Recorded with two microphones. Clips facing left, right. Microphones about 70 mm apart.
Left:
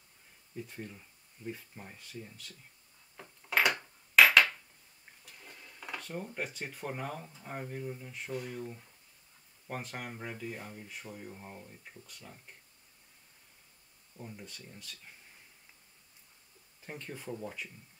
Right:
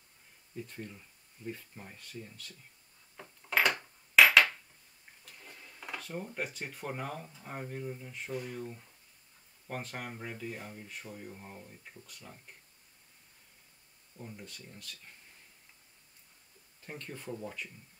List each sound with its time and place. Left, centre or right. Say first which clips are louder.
0.6 s speech: even; centre
3.2 s a sound: even; centre
5.2 s speech: even; centre
14.1 s speech: even; centre
16.8 s speech: even; centre